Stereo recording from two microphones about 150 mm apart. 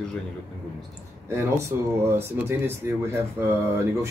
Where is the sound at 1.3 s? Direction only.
15° right (ahead or behind).